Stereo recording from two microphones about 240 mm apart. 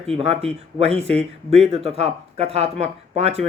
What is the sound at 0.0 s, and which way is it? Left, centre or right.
Speech, right.